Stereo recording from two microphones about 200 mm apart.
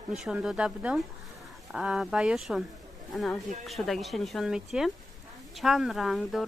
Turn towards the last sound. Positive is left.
turn(degrees=0)  # may be behind; listen again after turning